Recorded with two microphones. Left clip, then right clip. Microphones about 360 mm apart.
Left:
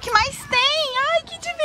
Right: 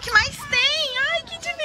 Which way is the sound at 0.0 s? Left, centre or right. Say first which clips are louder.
Even; centre.